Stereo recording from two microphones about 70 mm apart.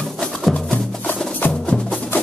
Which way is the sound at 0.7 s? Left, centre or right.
Centre.